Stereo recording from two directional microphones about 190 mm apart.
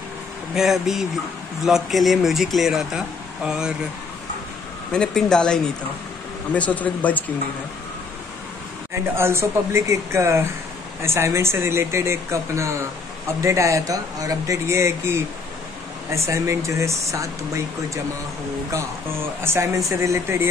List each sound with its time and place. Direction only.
0.6 s speech: centre (ahead or behind)
4.9 s speech: 5° left (ahead or behind)
8.9 s speech: 15° right (ahead or behind)
19.4 s speech: 15° right (ahead or behind)